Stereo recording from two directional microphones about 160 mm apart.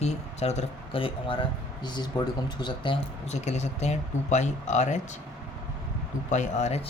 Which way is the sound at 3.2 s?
45° left (ahead or behind).